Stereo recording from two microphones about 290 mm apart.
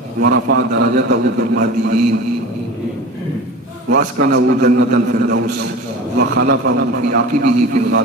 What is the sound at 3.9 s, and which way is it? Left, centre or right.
A man's voice, right.